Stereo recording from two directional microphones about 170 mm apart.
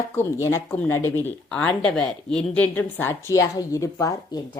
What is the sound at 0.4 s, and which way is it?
A woman's voice, 10° left (ahead or behind).